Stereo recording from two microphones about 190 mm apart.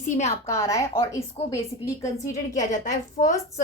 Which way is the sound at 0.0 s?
35° left (ahead or behind).